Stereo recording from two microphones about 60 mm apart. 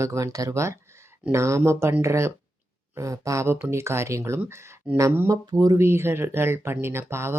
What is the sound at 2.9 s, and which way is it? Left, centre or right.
Speech, right.